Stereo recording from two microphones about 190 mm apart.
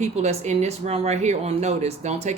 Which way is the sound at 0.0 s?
35° right (ahead or behind).